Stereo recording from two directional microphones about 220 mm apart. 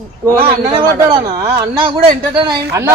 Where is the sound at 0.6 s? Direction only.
20° right (ahead or behind).